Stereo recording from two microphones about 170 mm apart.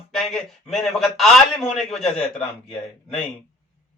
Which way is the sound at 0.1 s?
Centre (ahead or behind).